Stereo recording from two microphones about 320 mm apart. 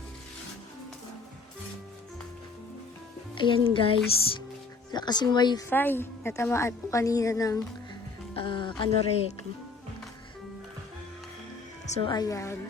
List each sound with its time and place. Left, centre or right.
3.3 s speech: centre
11.9 s speech: centre